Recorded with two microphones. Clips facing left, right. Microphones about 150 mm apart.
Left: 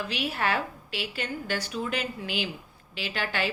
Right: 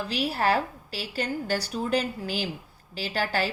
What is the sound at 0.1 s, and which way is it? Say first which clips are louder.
A woman's voice: right 6 dB; 35° right (ahead or behind).